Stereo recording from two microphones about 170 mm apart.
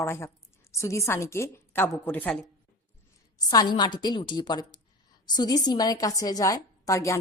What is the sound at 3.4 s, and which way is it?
A woman's voice, 25° left (ahead or behind).